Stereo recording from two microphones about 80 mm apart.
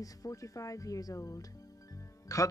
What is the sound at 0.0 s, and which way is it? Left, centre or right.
Speech, left.